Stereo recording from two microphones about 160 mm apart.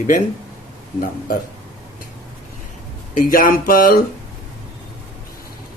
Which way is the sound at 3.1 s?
60° left (ahead or behind).